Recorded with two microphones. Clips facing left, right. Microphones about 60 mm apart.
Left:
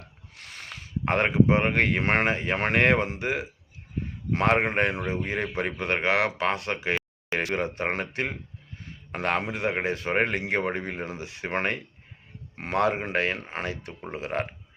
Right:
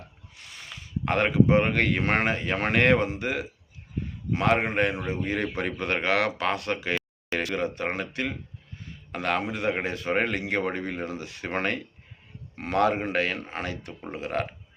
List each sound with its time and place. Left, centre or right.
0.3 s speech: left
4.3 s a man's voice: left